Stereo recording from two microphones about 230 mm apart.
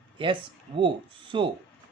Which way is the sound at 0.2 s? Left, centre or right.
Right.